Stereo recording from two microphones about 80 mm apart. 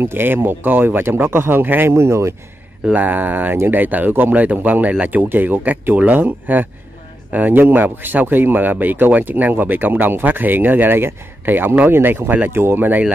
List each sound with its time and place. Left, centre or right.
0.0 s speech: right
2.9 s speech: right